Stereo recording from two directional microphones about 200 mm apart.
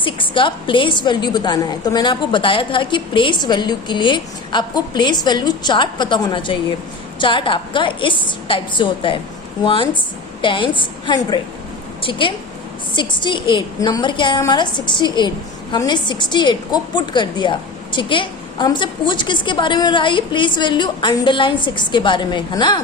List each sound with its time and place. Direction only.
0.0 s a woman's voice: 25° left (ahead or behind)